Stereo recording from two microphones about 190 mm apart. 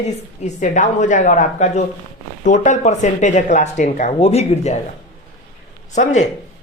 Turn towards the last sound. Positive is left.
turn(degrees=40)  # may be behind; listen again after turning